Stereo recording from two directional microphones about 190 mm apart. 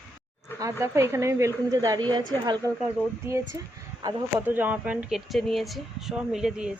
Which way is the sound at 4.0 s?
20° right (ahead or behind).